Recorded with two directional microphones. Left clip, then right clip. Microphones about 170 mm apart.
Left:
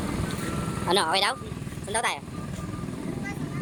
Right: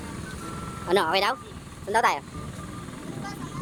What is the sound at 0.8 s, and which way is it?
A woman's voice, 25° right (ahead or behind).